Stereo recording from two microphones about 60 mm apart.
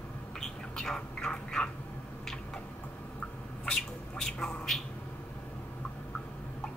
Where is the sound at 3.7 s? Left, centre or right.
Centre.